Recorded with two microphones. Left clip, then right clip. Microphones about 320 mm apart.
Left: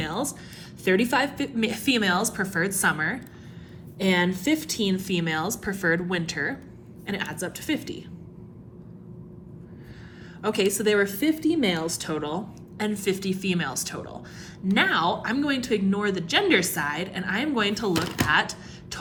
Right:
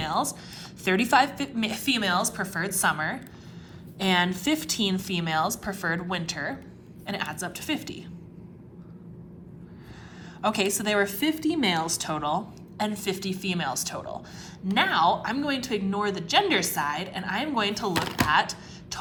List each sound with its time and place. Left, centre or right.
0.0 s a sound: centre
0.9 s a woman's voice: centre
10.4 s a woman's voice: centre
17.9 s a woman's voice: centre